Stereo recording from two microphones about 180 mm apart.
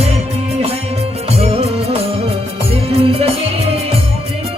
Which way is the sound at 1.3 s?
35° right (ahead or behind).